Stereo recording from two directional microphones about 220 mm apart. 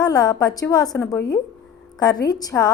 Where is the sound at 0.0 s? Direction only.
15° left (ahead or behind).